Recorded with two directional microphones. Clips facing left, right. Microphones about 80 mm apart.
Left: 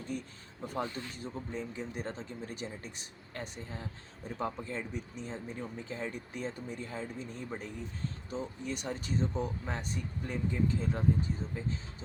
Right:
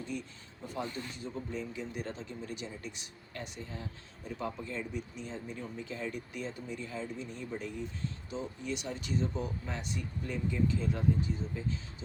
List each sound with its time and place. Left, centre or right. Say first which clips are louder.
0.1 s speech: even; left